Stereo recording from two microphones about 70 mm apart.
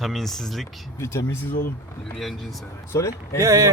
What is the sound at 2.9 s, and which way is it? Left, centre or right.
Speech, left.